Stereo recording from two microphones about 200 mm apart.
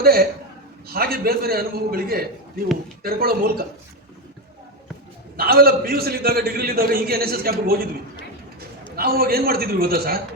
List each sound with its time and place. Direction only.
0.0 s a man's voice: 50° right (ahead or behind)
5.4 s a man's voice: 50° right (ahead or behind)
9.0 s a man's voice: 50° right (ahead or behind)